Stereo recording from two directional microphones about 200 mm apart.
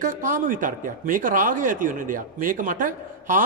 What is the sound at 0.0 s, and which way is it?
Speech, 40° right (ahead or behind).